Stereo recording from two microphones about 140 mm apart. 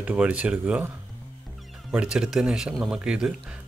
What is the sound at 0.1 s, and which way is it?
Speech, 10° right (ahead or behind).